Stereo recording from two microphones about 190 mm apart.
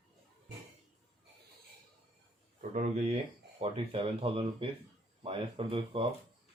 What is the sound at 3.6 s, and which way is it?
Speech, 30° right (ahead or behind).